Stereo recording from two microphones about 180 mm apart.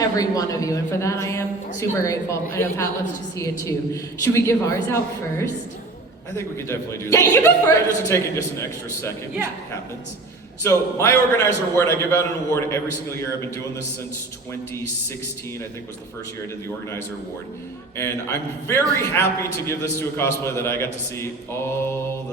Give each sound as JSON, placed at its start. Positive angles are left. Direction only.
{"t": 0.2, "sound": "a man's voice", "side_deg": 20}
{"t": 10.6, "sound": "a man's voice", "side_deg": 15}
{"t": 17.9, "sound": "a man's voice", "side_deg": 15}